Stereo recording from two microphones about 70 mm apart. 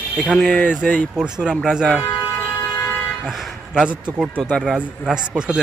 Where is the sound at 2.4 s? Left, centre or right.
Left.